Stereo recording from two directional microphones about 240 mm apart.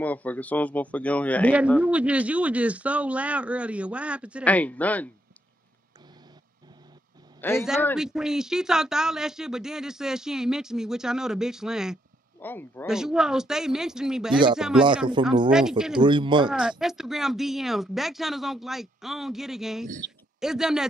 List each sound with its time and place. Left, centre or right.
0.0 s speech: centre
1.8 s speech: centre
4.5 s speech: centre
7.3 s a man's voice: centre
7.8 s speech: centre
12.4 s speech: centre
12.8 s speech: centre
15.2 s speech: centre
16.4 s speech: centre